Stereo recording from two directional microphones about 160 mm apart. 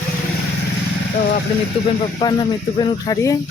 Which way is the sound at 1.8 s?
40° left (ahead or behind).